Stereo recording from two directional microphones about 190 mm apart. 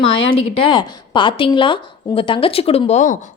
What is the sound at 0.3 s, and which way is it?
A woman's voice, 30° left (ahead or behind).